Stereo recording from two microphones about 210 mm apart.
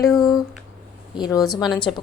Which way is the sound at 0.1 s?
Centre (ahead or behind).